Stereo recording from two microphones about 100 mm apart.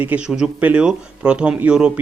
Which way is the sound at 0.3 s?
5° right (ahead or behind).